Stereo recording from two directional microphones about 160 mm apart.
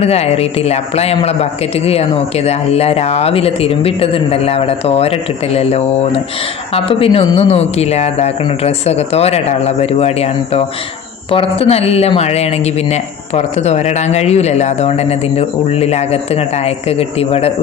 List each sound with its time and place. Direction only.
0.0 s speech: 40° left (ahead or behind)
2.5 s speech: 40° left (ahead or behind)